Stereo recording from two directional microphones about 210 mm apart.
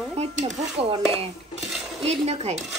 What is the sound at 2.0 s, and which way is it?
Speech, 30° right (ahead or behind).